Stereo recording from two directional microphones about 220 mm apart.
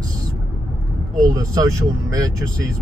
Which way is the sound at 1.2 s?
15° right (ahead or behind).